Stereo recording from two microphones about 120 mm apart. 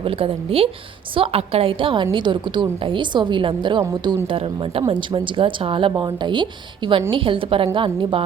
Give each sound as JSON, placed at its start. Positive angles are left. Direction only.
{"t": 0.0, "sound": "a woman's voice", "side_deg": -50}
{"t": 4.3, "sound": "a woman's voice", "side_deg": -50}